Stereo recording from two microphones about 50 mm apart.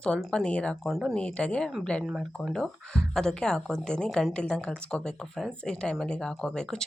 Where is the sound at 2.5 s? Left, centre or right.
Centre.